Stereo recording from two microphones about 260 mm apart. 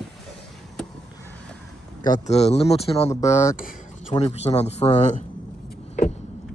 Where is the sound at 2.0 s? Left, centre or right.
Left.